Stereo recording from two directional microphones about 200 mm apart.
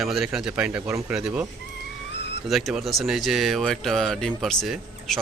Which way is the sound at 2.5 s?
Centre (ahead or behind).